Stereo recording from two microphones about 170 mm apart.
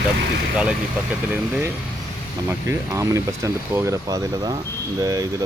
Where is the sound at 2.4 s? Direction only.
15° right (ahead or behind).